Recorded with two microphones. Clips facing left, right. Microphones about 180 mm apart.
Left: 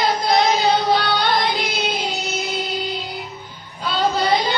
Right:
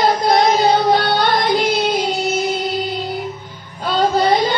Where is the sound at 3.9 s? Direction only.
50° right (ahead or behind).